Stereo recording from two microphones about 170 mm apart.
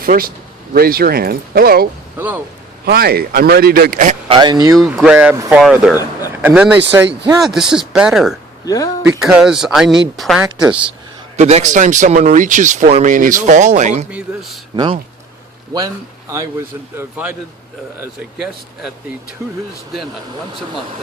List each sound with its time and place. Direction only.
0.0 s speech: 60° right (ahead or behind)
2.1 s speech: 10° right (ahead or behind)
2.8 s speech: 65° right (ahead or behind)
4.3 s speech: 25° right (ahead or behind)
4.7 s speech: centre (ahead or behind)
8.6 s speech: 20° left (ahead or behind)
9.2 s speech: 5° right (ahead or behind)
11.3 s speech: 40° right (ahead or behind)
14.1 s speech: 5° right (ahead or behind)
16.3 s speech: 15° right (ahead or behind)
19.4 s speech: 15° right (ahead or behind)